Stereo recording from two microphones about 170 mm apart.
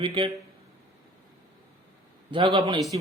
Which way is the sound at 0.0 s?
30° right (ahead or behind).